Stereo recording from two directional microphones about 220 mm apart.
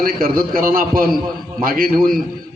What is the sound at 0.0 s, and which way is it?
A man's voice, 40° right (ahead or behind).